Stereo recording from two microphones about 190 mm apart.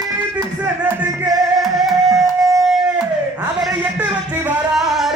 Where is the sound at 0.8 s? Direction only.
20° right (ahead or behind).